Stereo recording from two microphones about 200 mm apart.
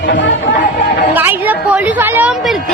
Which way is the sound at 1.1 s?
10° right (ahead or behind).